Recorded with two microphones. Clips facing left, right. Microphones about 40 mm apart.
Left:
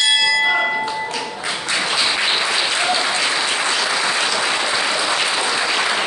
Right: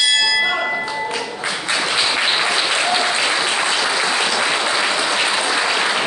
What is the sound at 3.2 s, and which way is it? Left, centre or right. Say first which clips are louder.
Applause: right 1 dB; centre.